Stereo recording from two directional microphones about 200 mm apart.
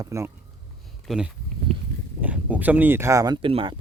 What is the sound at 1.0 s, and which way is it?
Speech, centre (ahead or behind).